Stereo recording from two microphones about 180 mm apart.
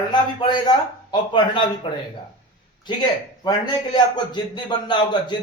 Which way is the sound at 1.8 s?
30° left (ahead or behind).